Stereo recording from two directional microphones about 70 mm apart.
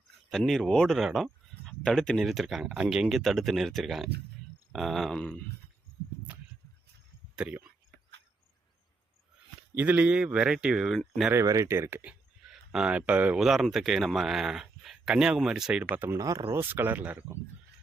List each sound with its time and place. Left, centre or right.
0.3 s speech: centre
7.4 s speech: centre
9.7 s speech: right; by 10.9 s centre
11.4 s speech: right
11.7 s speech: right
12.5 s a sound: centre
12.9 s speech: right
13.3 s speech: centre
15.8 s speech: right
16.1 s speech: right
16.5 s speech: right